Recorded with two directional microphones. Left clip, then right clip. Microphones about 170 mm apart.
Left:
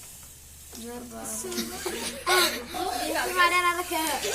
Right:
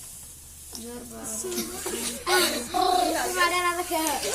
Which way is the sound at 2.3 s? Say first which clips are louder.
Even; 25° right (ahead or behind).